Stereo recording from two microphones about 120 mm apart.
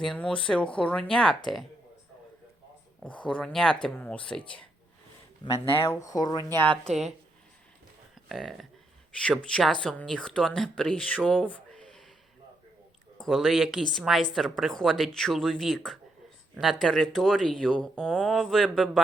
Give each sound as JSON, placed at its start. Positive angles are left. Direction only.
{"t": 0.0, "sound": "speech", "side_deg": 5}
{"t": 3.2, "sound": "speech", "side_deg": 5}
{"t": 5.5, "sound": "speech", "side_deg": 25}
{"t": 6.5, "sound": "speech", "side_deg": 15}
{"t": 6.8, "sound": "a woman's voice", "side_deg": 0}
{"t": 8.3, "sound": "a woman's voice", "side_deg": 0}
{"t": 13.1, "sound": "a woman's voice", "side_deg": 0}